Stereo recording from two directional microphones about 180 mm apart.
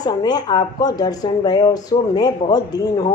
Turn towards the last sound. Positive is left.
turn(degrees=25)  # may be behind; listen again after turning